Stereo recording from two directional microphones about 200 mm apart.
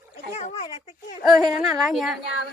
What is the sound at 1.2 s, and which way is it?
A woman's voice, centre (ahead or behind).